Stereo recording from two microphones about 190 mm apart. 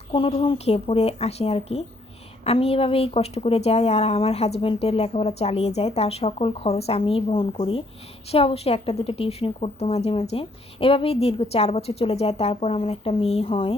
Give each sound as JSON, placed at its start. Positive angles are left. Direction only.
{"t": 0.1, "sound": "a woman's voice", "side_deg": 30}